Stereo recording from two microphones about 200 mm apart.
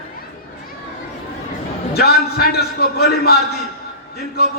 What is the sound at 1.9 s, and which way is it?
A man's voice, 50° left (ahead or behind).